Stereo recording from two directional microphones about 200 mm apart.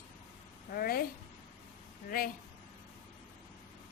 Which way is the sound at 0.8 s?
50° left (ahead or behind).